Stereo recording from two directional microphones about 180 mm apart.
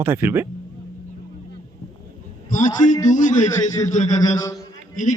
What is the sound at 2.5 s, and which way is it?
A man's voice, 45° left (ahead or behind).